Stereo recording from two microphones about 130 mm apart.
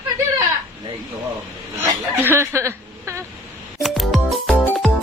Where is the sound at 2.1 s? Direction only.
15° right (ahead or behind).